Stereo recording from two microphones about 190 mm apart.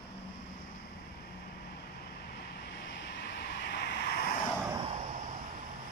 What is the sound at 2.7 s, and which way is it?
Vehicle, 65° left (ahead or behind).